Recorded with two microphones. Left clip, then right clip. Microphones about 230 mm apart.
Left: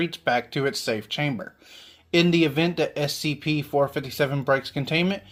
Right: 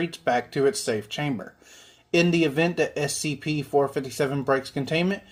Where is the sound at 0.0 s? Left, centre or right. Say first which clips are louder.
Left 1 dB; left.